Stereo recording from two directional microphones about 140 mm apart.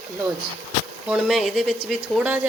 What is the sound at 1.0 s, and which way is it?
Speech, 5° right (ahead or behind).